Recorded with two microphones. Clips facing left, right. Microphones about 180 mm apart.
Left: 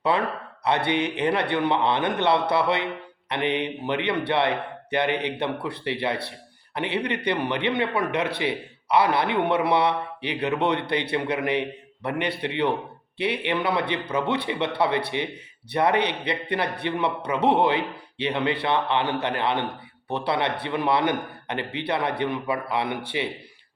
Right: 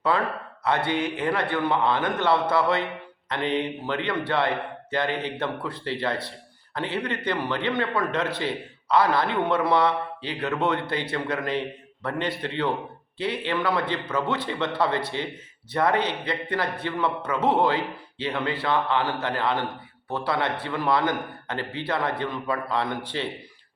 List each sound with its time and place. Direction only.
0.9 s a man's voice: 20° left (ahead or behind)